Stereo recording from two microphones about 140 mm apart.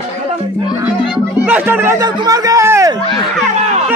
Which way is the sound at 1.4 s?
15° right (ahead or behind).